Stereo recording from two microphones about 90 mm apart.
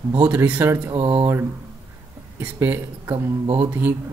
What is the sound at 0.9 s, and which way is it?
Speech, 70° right (ahead or behind).